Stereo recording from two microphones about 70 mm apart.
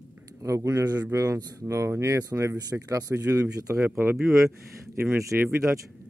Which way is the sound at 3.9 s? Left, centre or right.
Right.